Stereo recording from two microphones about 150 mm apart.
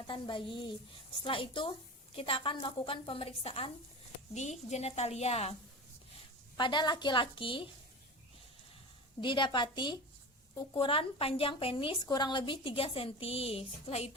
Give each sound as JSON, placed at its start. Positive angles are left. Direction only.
{"t": 0.1, "sound": "a woman's voice", "side_deg": 35}
{"t": 4.4, "sound": "a woman's voice", "side_deg": 50}
{"t": 6.6, "sound": "a woman's voice", "side_deg": 30}
{"t": 9.2, "sound": "a woman's voice", "side_deg": 30}